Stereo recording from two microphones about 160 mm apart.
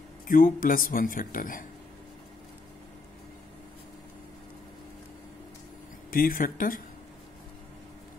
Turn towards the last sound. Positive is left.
turn(degrees=60)  # may be behind; listen again after turning